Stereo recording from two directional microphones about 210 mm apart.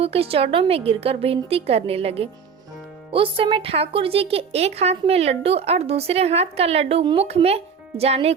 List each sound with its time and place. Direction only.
0.0 s speech: 30° right (ahead or behind)